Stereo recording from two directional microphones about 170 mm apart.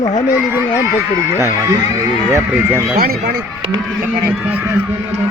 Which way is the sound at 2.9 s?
65° right (ahead or behind).